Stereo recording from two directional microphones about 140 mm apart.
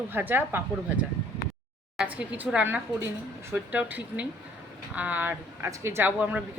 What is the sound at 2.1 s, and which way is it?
Speech, 10° right (ahead or behind).